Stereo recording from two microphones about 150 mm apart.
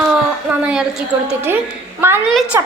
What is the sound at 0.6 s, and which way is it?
A woman's voice, 5° right (ahead or behind).